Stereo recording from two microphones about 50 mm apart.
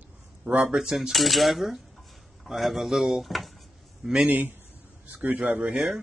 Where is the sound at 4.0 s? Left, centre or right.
Centre.